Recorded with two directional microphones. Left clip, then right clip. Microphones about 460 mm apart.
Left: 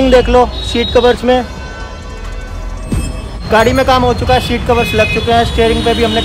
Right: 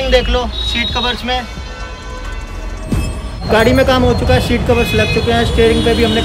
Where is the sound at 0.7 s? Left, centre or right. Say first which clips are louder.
Left 9 dB; centre.